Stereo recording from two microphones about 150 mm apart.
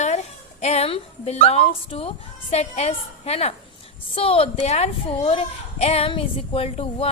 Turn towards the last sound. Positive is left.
turn(degrees=40)  # may be behind; listen again after turning